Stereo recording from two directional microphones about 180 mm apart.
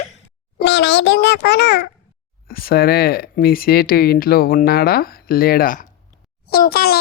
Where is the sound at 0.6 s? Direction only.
75° left (ahead or behind).